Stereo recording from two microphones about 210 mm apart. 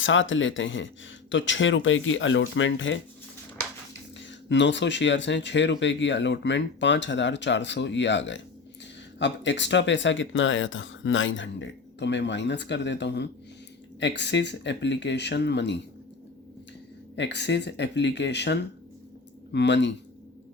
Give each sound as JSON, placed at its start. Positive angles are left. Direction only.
{"t": 0.0, "sound": "speech", "side_deg": 65}
{"t": 4.2, "sound": "speech", "side_deg": 60}
{"t": 17.2, "sound": "speech", "side_deg": 55}